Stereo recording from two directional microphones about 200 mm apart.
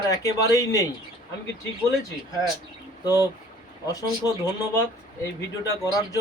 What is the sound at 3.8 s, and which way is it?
Speech, 20° left (ahead or behind).